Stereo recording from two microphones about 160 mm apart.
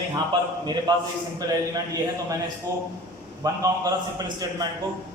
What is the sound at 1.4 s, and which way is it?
A man's voice, 20° right (ahead or behind).